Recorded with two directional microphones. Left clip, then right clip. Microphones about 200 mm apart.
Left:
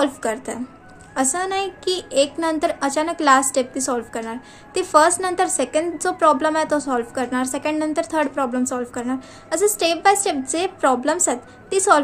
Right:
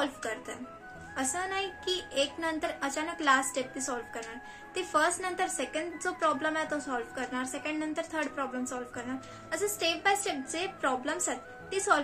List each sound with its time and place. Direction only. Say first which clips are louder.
0.0 s a woman's voice: left 12 dB; 55° left (ahead or behind)